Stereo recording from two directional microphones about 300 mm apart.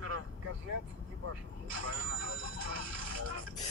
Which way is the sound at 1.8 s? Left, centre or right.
Right.